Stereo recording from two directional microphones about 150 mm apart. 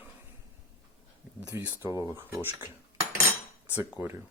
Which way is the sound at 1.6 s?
15° right (ahead or behind).